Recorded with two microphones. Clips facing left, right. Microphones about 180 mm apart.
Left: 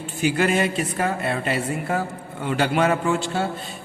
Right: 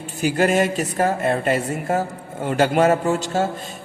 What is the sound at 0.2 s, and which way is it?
A man's voice, 40° right (ahead or behind).